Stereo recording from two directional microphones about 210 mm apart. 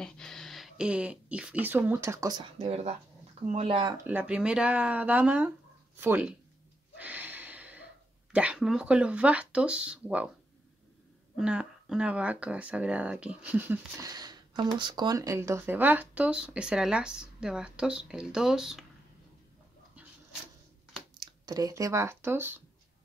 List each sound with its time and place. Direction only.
0.0 s speech: 5° left (ahead or behind); by 2.4 s 15° right (ahead or behind)
2.6 s speech: 30° right (ahead or behind)
3.9 s speech: 10° right (ahead or behind)
7.0 s a sound: 5° right (ahead or behind)
11.3 s speech: 5° right (ahead or behind)
21.2 s speech: 15° right (ahead or behind)